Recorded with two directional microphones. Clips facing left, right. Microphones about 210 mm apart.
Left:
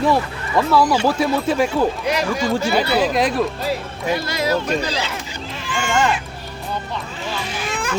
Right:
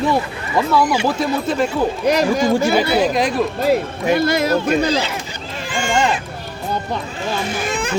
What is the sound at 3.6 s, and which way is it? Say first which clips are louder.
Speech: right 7 dB; 55° right (ahead or behind).